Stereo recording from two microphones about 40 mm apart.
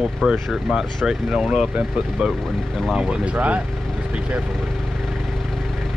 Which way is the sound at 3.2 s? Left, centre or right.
Right.